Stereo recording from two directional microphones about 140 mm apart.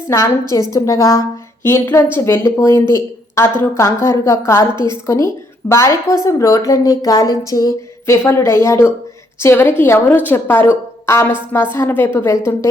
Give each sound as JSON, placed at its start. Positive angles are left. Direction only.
{"t": 0.1, "sound": "a woman's voice", "side_deg": 20}
{"t": 4.7, "sound": "a woman's voice", "side_deg": -35}
{"t": 5.0, "sound": "a woman's voice", "side_deg": 20}